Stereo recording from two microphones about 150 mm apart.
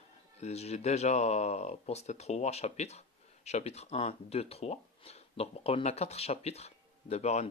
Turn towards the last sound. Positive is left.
turn(degrees=50)  # may be behind; listen again after turning